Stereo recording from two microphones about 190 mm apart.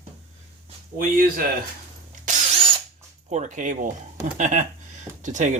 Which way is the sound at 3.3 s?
40° right (ahead or behind).